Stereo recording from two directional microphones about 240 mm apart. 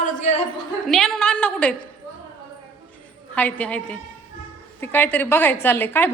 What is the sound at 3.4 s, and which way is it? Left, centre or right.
A woman's voice, centre.